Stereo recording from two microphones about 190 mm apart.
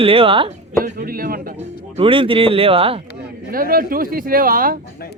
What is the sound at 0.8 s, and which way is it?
Speech, 50° right (ahead or behind).